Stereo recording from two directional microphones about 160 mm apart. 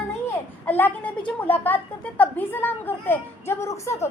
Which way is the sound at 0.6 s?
10° left (ahead or behind).